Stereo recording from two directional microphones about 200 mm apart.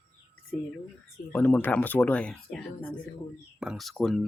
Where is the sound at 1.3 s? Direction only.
5° left (ahead or behind).